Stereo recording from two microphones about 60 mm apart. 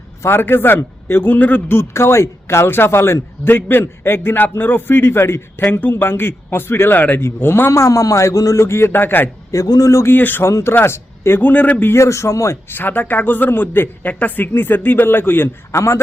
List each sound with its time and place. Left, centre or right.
0.2 s a man's voice: left
1.7 s a man's voice: left
7.7 s a man's voice: left
9.5 s speech: left
10.2 s a man's voice: left
10.4 s a man's voice: left
11.9 s a man's voice: left
12.6 s a man's voice: left
15.7 s a man's voice: left